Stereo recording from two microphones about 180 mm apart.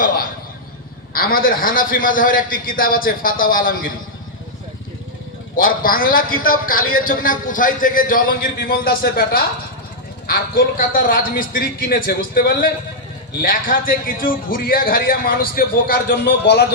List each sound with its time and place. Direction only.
1.1 s a man's voice: 55° left (ahead or behind)
5.5 s a man's voice: 50° left (ahead or behind); by 16.6 s 70° left (ahead or behind)